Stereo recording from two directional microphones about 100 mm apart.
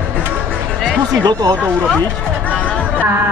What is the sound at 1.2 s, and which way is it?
Speech, 40° right (ahead or behind).